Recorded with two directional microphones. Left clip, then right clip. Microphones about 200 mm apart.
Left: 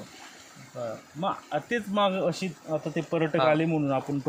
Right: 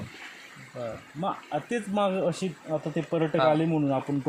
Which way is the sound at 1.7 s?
30° right (ahead or behind).